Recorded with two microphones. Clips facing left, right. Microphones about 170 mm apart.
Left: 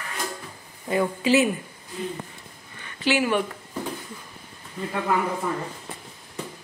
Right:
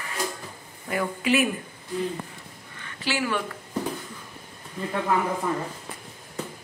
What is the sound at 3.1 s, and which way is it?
Speech, 20° left (ahead or behind).